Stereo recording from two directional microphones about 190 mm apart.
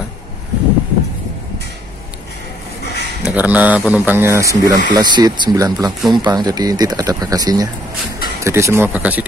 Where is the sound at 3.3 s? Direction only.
10° right (ahead or behind).